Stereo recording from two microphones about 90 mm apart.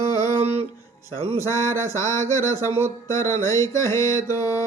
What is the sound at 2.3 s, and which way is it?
Music, 40° left (ahead or behind).